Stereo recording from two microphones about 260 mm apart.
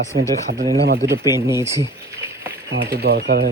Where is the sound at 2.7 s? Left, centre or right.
Right.